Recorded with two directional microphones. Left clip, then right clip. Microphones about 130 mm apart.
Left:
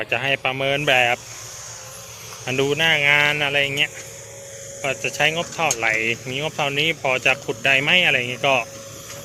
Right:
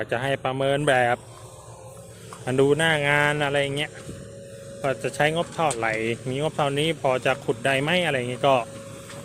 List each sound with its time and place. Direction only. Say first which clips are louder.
0.0 s speech: left 4 dB; 30° right (ahead or behind)
2.4 s speech: even; 35° right (ahead or behind)
2.6 s speech: left 5 dB; 45° right (ahead or behind)